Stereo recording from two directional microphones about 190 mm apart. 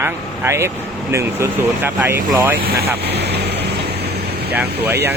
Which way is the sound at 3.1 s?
60° right (ahead or behind).